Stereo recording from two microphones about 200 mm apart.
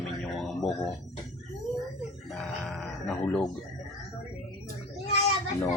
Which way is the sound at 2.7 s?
5° left (ahead or behind).